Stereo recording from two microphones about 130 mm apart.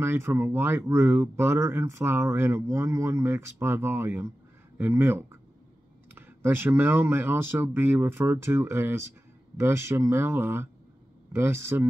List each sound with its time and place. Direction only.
0.0 s speech: 20° right (ahead or behind)